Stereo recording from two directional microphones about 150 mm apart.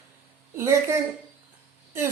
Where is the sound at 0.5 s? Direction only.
20° right (ahead or behind).